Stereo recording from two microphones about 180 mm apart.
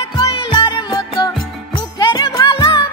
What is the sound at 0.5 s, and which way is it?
Music, 25° left (ahead or behind).